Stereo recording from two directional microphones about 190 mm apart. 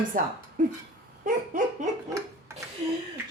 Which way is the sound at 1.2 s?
45° right (ahead or behind).